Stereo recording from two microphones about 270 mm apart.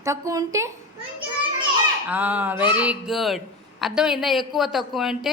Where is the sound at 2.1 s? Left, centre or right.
Centre.